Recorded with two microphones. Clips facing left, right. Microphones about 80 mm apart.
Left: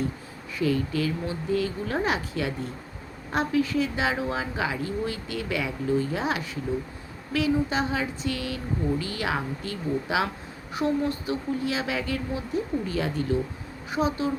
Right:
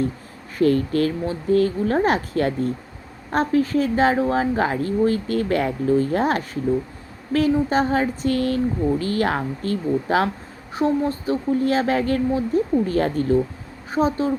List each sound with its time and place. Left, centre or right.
0.6 s speech: right
10.8 s a woman's voice: right